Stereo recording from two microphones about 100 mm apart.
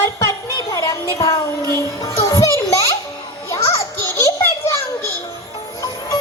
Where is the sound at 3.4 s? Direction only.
25° left (ahead or behind).